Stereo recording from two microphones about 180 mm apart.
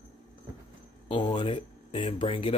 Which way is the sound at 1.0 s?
25° left (ahead or behind).